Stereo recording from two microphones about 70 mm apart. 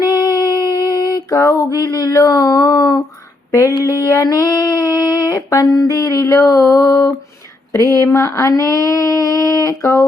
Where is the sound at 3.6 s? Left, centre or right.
Left.